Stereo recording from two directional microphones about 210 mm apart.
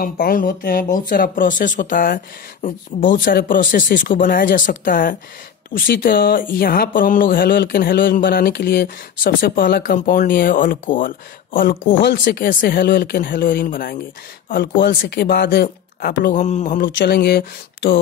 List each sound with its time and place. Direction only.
0.0 s speech: 40° left (ahead or behind)